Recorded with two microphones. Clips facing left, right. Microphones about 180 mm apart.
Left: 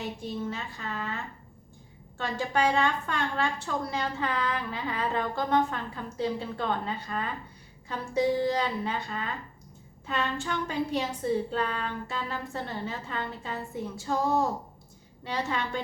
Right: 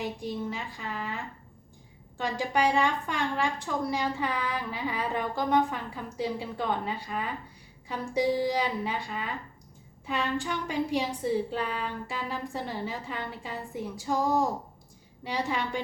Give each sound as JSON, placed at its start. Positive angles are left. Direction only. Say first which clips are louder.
{"t": 0.0, "sound": "a woman's voice", "louder": "right 1 dB", "side_deg": -15}